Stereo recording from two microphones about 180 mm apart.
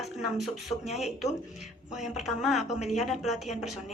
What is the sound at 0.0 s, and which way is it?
A woman's voice, centre (ahead or behind).